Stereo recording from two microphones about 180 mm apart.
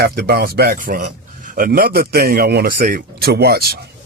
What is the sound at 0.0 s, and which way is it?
Speech, 60° right (ahead or behind).